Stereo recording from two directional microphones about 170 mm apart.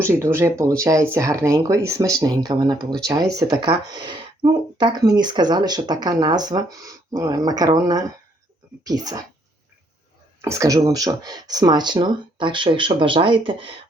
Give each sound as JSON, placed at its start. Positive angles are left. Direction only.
{"t": 0.0, "sound": "speech", "side_deg": -15}
{"t": 10.4, "sound": "speech", "side_deg": -20}